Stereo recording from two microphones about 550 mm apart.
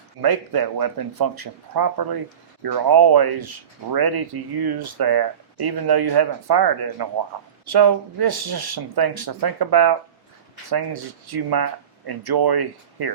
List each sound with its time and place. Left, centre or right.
0.2 s speech: right